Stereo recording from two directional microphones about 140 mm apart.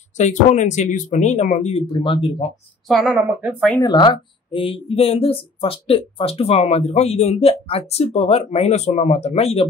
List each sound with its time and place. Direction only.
0.2 s speech: 60° left (ahead or behind); by 2.5 s 40° left (ahead or behind)
2.9 s a woman's voice: centre (ahead or behind)
3.3 s speech: 10° right (ahead or behind)
3.8 s speech: 30° left (ahead or behind); by 9.7 s 45° left (ahead or behind)